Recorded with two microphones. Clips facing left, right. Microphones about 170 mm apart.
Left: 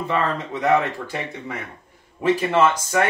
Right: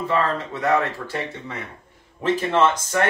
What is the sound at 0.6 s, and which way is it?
Speech, 20° left (ahead or behind).